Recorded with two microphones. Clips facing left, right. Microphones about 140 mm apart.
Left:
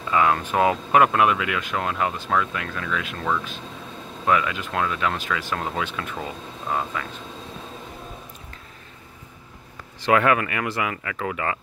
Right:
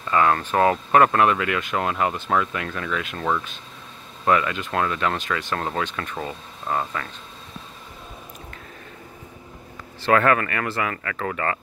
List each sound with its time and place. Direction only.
0.1 s speech: 5° left (ahead or behind)
10.0 s speech: 15° left (ahead or behind)